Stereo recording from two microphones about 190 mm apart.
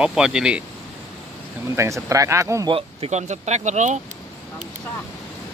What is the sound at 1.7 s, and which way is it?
Speech, 15° right (ahead or behind).